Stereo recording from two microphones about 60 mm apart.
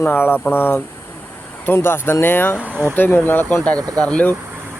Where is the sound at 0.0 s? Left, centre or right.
Left.